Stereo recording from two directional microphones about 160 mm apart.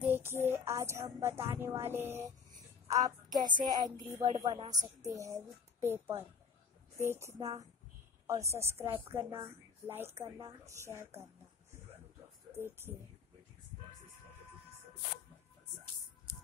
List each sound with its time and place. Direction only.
0.0 s child singing: 15° right (ahead or behind)
1.5 s a woman's voice: 15° right (ahead or behind)
12.5 s a woman's voice: 15° right (ahead or behind)